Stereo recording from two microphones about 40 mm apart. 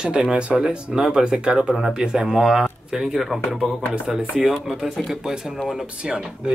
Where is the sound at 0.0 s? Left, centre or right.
Right.